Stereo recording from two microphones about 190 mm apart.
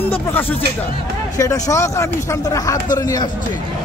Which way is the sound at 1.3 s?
20° left (ahead or behind).